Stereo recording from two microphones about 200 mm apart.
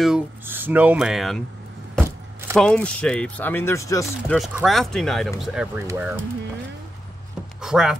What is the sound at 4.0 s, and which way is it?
Speech, centre (ahead or behind).